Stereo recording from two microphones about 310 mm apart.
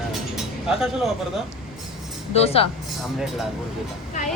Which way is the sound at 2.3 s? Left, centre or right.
Centre.